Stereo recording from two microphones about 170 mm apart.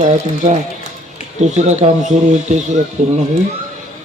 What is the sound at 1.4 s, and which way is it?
A man's voice, 40° right (ahead or behind).